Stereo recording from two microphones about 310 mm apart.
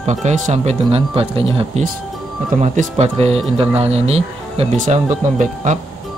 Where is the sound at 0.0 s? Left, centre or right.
Right.